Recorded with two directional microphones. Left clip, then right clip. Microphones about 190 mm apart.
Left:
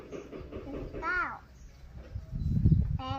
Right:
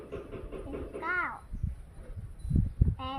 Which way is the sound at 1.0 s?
15° left (ahead or behind).